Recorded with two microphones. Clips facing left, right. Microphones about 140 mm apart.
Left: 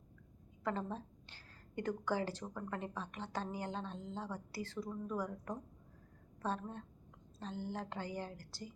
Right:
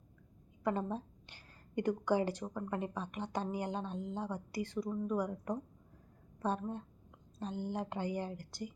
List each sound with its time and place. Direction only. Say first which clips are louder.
0.6 s a woman's voice: right 4 dB; 15° right (ahead or behind)